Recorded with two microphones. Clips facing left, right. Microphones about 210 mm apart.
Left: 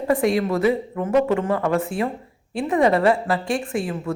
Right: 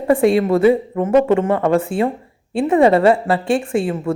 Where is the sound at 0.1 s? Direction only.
30° right (ahead or behind).